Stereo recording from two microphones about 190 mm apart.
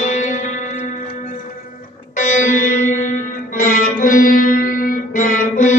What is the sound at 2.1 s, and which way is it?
Music, 45° left (ahead or behind).